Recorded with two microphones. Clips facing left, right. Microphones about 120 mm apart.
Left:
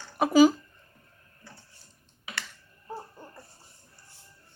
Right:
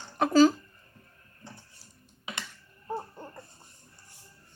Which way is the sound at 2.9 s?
25° right (ahead or behind).